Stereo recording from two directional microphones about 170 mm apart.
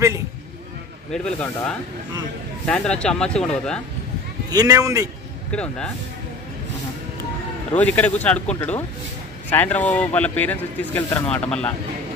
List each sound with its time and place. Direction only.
1.1 s speech: 5° left (ahead or behind)
4.5 s a man's voice: 20° right (ahead or behind)
5.5 s speech: 5° left (ahead or behind)
7.7 s speech: 10° left (ahead or behind)